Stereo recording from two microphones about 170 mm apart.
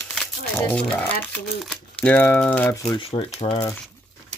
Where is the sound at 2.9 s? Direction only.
35° left (ahead or behind).